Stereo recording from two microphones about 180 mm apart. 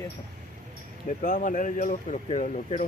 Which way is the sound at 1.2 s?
45° left (ahead or behind).